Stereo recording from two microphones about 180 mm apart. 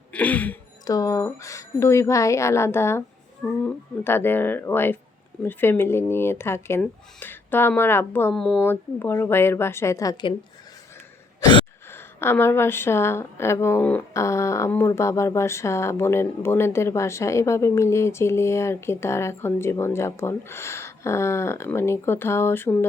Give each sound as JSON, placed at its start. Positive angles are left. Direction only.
{"t": 0.1, "sound": "a woman's voice", "side_deg": 10}
{"t": 0.9, "sound": "a woman's voice", "side_deg": 20}
{"t": 8.6, "sound": "a woman's voice", "side_deg": 10}
{"t": 11.3, "sound": "a sound", "side_deg": 25}
{"t": 11.9, "sound": "a woman's voice", "side_deg": 15}